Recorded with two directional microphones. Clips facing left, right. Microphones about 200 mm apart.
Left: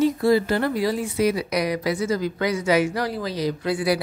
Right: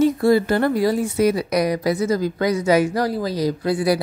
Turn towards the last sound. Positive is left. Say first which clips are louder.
# right 3 dB
turn(degrees=-40)  # may be behind; listen again after turning